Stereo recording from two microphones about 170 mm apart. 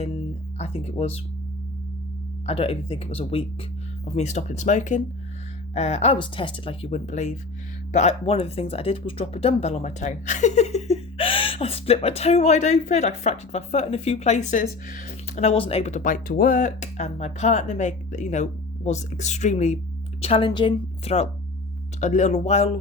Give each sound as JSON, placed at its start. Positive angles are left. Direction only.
{"t": 0.6, "sound": "speech", "side_deg": 35}
{"t": 2.5, "sound": "speech", "side_deg": 35}